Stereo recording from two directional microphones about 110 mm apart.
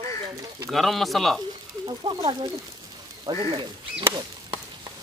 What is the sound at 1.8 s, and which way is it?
Speech, 45° right (ahead or behind).